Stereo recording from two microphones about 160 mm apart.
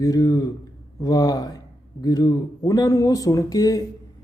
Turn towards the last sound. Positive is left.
turn(degrees=25)  # may be behind; listen again after turning